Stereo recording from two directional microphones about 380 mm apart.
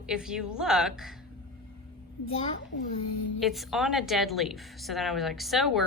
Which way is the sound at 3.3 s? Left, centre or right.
Centre.